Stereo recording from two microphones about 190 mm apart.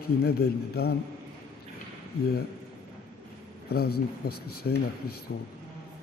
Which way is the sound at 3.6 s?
55° left (ahead or behind).